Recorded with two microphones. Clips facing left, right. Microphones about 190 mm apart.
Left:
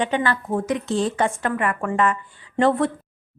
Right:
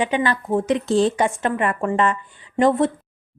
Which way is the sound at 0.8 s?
35° right (ahead or behind).